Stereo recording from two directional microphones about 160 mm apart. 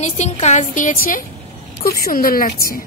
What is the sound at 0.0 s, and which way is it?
A woman's voice, 45° left (ahead or behind).